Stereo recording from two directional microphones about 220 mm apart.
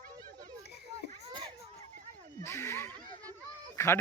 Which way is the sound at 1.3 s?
20° right (ahead or behind).